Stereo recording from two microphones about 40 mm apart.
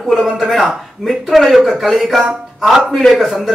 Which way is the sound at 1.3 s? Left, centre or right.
Centre.